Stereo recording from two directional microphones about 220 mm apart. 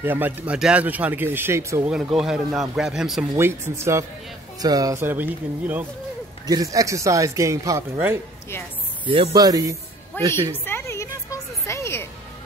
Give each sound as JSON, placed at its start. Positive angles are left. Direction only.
{"t": 0.0, "sound": "a man's voice", "side_deg": -10}
{"t": 9.0, "sound": "a man's voice", "side_deg": -25}
{"t": 10.2, "sound": "a woman's voice", "side_deg": 10}
{"t": 10.6, "sound": "a sound", "side_deg": 10}